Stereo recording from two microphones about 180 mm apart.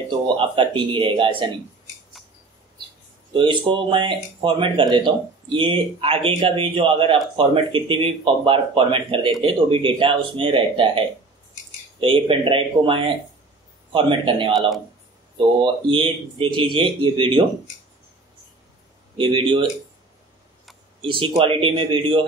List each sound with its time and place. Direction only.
0.4 s speech: 25° right (ahead or behind)
3.3 s speech: 25° right (ahead or behind)
19.1 s speech: 30° right (ahead or behind)
21.0 s speech: 30° right (ahead or behind)